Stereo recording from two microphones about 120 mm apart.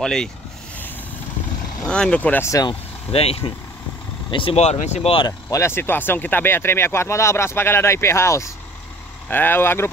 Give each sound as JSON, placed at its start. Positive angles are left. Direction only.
{"t": 0.0, "sound": "speech", "side_deg": 5}
{"t": 1.9, "sound": "speech", "side_deg": 10}
{"t": 2.4, "sound": "speech", "side_deg": 30}
{"t": 3.1, "sound": "speech", "side_deg": 55}
{"t": 4.6, "sound": "speech", "side_deg": 65}
{"t": 5.5, "sound": "speech", "side_deg": 20}